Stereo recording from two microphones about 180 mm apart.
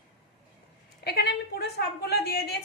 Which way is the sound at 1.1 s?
65° left (ahead or behind).